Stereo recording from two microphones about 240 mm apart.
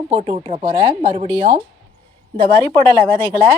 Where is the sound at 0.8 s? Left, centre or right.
Centre.